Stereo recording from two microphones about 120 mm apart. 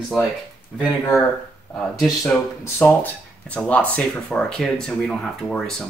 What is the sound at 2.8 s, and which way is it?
Speech, 10° left (ahead or behind).